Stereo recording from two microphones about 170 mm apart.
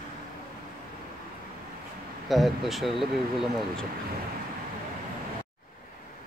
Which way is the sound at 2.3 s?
Centre (ahead or behind).